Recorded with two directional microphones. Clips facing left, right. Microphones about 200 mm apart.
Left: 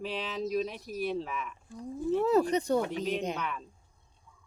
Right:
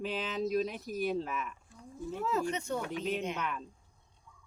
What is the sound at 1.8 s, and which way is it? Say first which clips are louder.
A woman's voice: left 9 dB; 35° left (ahead or behind).